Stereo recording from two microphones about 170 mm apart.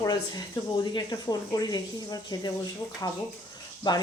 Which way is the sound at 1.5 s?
20° left (ahead or behind).